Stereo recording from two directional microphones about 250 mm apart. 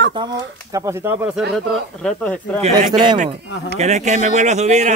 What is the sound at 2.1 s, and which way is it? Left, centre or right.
Speech, centre.